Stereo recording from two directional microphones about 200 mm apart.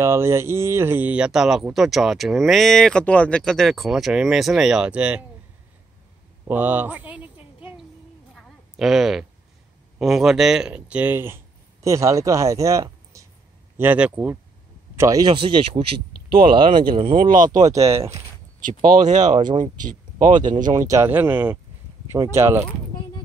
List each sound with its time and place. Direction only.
0.0 s speech: 15° right (ahead or behind)
6.4 s a sound: 10° right (ahead or behind)
9.9 s speech: centre (ahead or behind); by 17.8 s 20° right (ahead or behind)
18.6 s speech: 40° right (ahead or behind)
19.4 s speech: 25° right (ahead or behind)
19.8 s speech: 40° right (ahead or behind)
20.7 s speech: 15° right (ahead or behind)